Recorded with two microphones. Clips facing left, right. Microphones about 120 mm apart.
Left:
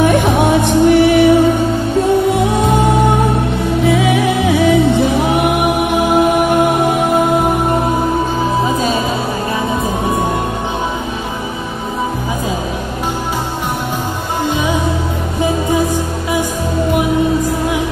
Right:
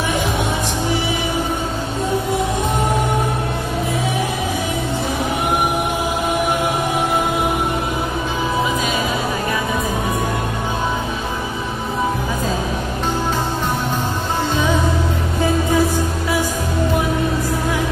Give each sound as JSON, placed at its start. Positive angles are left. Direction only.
{"t": 0.0, "sound": "music", "side_deg": 60}
{"t": 3.8, "sound": "music", "side_deg": 80}